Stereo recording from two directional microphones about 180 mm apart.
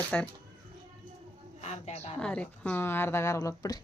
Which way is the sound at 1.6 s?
35° left (ahead or behind).